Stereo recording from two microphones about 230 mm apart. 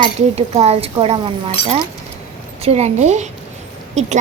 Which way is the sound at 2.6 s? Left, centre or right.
Right.